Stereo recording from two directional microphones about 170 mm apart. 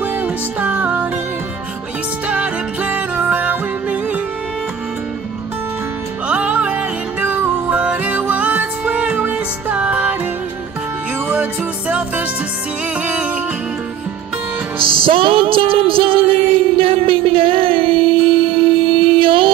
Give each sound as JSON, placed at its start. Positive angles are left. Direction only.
{"t": 0.0, "sound": "music", "side_deg": -10}
{"t": 2.2, "sound": "music", "side_deg": -5}
{"t": 6.2, "sound": "music", "side_deg": -5}
{"t": 13.0, "sound": "music", "side_deg": -5}
{"t": 14.8, "sound": "music", "side_deg": -30}